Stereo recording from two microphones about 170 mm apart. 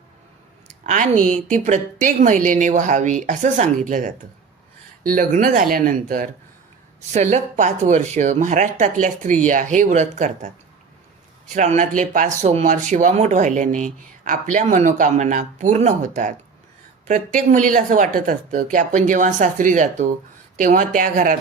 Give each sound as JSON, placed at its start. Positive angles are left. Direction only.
{"t": 0.9, "sound": "speech", "side_deg": -45}
{"t": 7.1, "sound": "speech", "side_deg": -45}
{"t": 11.5, "sound": "speech", "side_deg": -45}